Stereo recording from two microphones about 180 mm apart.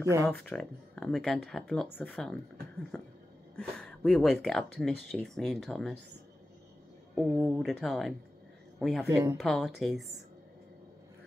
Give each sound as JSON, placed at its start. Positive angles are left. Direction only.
{"t": 0.2, "sound": "speech", "side_deg": 10}
{"t": 3.5, "sound": "speech", "side_deg": 5}
{"t": 7.2, "sound": "speech", "side_deg": 0}
{"t": 9.1, "sound": "speech", "side_deg": -15}
{"t": 9.4, "sound": "speech", "side_deg": 0}